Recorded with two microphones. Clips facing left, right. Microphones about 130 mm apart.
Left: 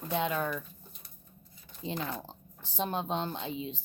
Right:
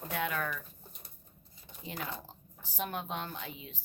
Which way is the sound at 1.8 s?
25° left (ahead or behind).